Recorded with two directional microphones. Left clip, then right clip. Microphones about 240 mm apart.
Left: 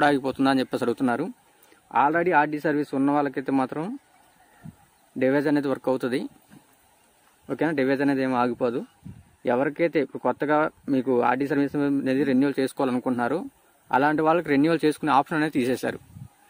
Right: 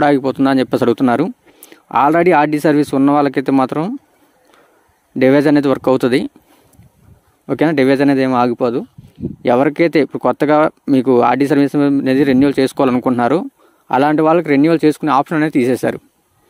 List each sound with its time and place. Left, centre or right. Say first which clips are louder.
0.0 s speech: right 8 dB; right
5.2 s speech: right 11 dB; right
7.4 s speech: right 11 dB; right